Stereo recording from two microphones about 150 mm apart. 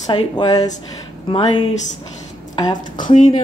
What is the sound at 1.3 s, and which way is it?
Speech, 35° left (ahead or behind).